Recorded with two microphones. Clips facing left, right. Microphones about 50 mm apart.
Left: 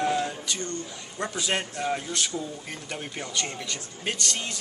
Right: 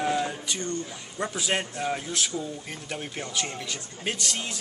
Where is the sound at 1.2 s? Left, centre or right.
Centre.